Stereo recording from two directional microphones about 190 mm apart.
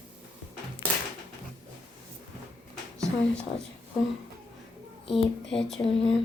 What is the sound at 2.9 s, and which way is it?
Speech, 5° left (ahead or behind).